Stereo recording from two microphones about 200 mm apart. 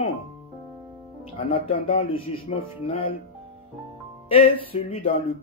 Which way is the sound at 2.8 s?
25° left (ahead or behind).